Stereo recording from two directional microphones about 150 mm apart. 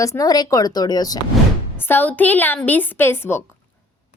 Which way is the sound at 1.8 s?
10° left (ahead or behind).